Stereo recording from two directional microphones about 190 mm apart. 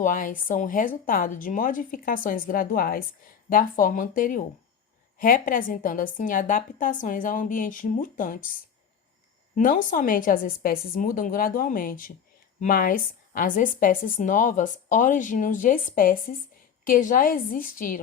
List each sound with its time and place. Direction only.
0.0 s a woman's voice: 45° left (ahead or behind)
9.6 s a woman's voice: 45° left (ahead or behind)